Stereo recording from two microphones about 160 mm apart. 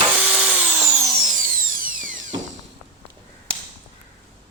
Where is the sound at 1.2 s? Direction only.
55° right (ahead or behind).